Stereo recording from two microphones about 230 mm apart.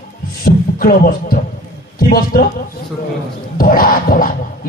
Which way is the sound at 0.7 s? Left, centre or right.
Left.